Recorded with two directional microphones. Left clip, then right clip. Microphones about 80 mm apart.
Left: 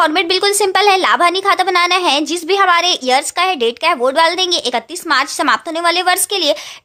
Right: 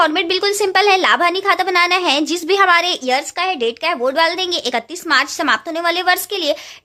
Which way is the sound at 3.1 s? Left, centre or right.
Left.